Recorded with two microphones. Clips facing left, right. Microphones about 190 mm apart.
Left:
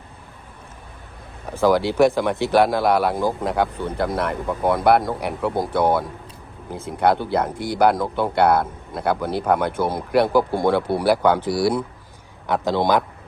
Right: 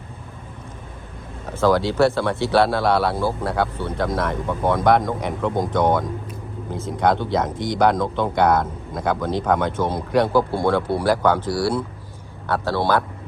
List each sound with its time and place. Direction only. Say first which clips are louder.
1.5 s speech: even; 15° left (ahead or behind)